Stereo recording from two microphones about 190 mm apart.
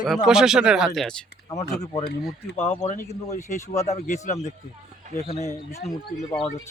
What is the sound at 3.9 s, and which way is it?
Speech, 40° left (ahead or behind).